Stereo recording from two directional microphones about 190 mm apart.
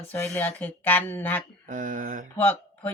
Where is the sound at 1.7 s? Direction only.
45° right (ahead or behind).